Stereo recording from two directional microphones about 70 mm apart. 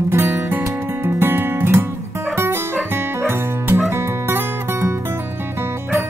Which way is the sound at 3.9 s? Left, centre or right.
Right.